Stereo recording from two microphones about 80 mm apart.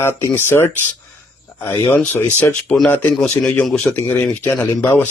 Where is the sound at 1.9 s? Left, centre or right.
Left.